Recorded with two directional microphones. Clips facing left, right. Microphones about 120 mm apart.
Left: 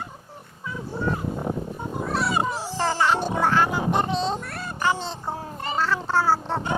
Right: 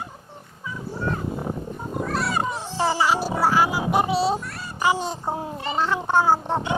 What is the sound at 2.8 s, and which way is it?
Music, 5° right (ahead or behind).